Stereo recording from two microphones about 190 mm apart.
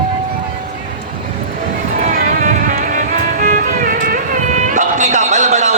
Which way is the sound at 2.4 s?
40° right (ahead or behind).